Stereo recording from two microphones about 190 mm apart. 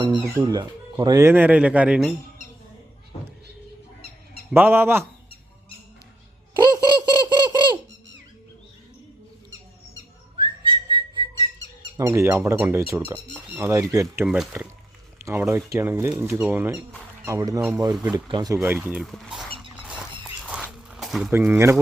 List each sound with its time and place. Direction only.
0.0 s speech: 25° right (ahead or behind); by 2.1 s 5° right (ahead or behind)
4.5 s speech: 10° right (ahead or behind)
6.6 s toothbrush: 20° right (ahead or behind)
10.3 s whistling: 25° right (ahead or behind)
11.9 s speech: 15° right (ahead or behind)
14.3 s speech: 5° right (ahead or behind)
20.5 s a sound: 5° right (ahead or behind)
21.2 s speech: 10° right (ahead or behind)